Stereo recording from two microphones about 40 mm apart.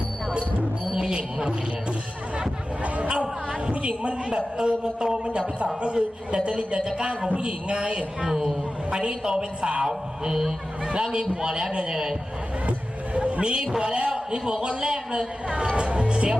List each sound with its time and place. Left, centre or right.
1.1 s speech: right
3.7 s a man's voice: right
13.1 s vehicle: right
13.7 s a man's voice: right